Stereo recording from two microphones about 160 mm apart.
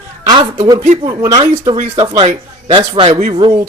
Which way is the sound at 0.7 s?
45° right (ahead or behind).